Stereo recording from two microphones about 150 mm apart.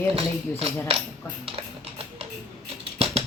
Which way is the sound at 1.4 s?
40° right (ahead or behind).